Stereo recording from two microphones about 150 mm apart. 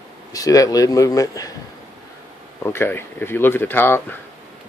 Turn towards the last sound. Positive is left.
turn(degrees=15)  # may be behind; listen again after turning